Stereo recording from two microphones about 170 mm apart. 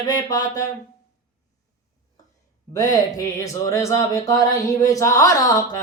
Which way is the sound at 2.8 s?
20° left (ahead or behind).